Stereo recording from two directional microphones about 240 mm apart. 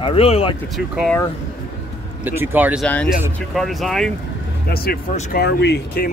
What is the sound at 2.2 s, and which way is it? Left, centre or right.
Speech, centre.